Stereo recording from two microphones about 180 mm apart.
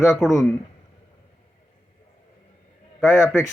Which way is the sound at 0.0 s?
Centre (ahead or behind).